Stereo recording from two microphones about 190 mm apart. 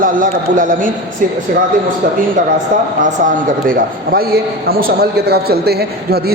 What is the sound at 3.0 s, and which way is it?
A man's voice, 45° right (ahead or behind).